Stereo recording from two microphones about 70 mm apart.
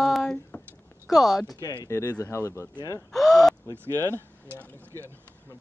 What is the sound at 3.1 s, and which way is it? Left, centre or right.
Gasp, centre.